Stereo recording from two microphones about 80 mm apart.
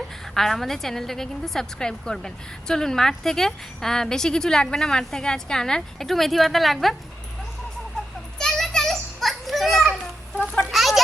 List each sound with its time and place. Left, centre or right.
0.3 s a woman's voice: centre
8.4 s children playing: centre
10.7 s a sound: centre